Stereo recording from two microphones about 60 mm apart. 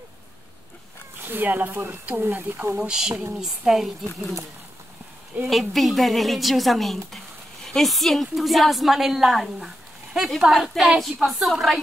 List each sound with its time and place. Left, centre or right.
1.2 s speech: right
2.8 s a woman's voice: centre
5.5 s a woman's voice: centre